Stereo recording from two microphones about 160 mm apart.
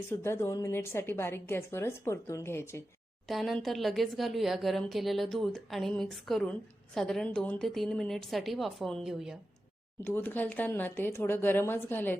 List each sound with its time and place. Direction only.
0.1 s a woman's voice: 15° left (ahead or behind)
3.2 s speech: centre (ahead or behind)
10.0 s a woman's voice: 10° left (ahead or behind)